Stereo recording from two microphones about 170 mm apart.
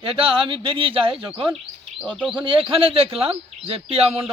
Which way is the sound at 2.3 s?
30° right (ahead or behind).